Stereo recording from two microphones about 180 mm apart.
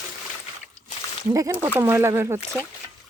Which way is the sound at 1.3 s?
15° right (ahead or behind).